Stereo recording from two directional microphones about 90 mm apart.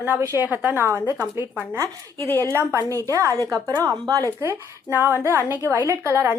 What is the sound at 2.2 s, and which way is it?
Speech, 30° left (ahead or behind).